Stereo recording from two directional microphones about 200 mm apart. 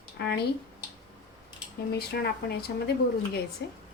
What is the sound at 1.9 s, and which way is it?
A woman's voice, 50° left (ahead or behind).